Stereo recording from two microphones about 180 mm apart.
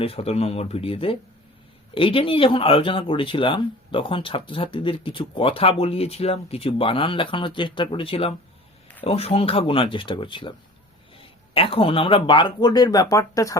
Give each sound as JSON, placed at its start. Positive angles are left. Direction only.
{"t": 0.0, "sound": "speech", "side_deg": 30}